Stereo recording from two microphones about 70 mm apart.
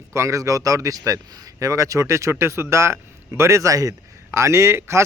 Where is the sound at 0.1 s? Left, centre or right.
Right.